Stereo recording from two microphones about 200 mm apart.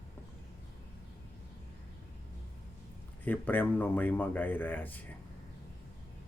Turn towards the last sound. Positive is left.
turn(degrees=10)  # may be behind; listen again after turning